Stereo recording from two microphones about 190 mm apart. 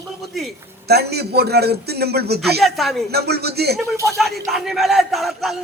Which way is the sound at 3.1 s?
60° right (ahead or behind).